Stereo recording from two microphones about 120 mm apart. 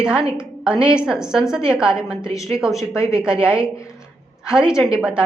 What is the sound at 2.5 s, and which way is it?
Speech, 15° left (ahead or behind).